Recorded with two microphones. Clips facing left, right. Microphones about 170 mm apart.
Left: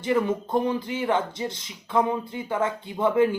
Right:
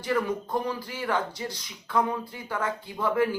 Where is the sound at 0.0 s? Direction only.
25° left (ahead or behind).